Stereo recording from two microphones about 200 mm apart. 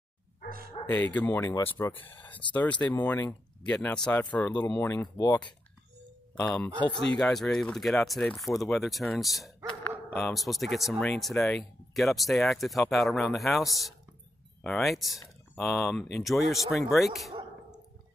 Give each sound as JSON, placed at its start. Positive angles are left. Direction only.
{"t": 0.8, "sound": "a sound", "side_deg": 30}
{"t": 1.1, "sound": "speech", "side_deg": 10}
{"t": 6.3, "sound": "speech", "side_deg": 5}